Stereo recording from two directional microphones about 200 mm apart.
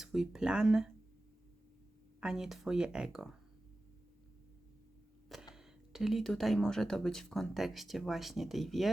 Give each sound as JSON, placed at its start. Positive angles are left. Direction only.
{"t": 0.0, "sound": "speech", "side_deg": 0}
{"t": 2.2, "sound": "speech", "side_deg": 0}
{"t": 5.5, "sound": "speech", "side_deg": 0}